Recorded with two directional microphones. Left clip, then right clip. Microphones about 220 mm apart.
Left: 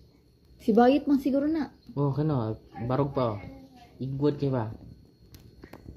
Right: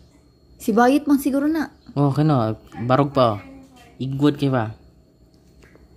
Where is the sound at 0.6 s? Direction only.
15° right (ahead or behind).